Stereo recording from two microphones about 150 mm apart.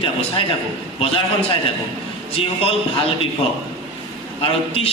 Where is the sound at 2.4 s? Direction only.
40° left (ahead or behind).